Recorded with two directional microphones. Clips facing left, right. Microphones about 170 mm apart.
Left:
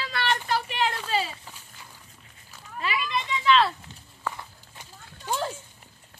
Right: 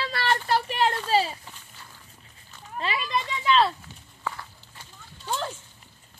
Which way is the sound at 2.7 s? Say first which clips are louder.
Right 1 dB; 30° right (ahead or behind).